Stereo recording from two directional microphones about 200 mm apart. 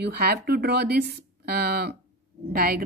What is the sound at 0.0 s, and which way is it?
A woman's voice, 50° right (ahead or behind).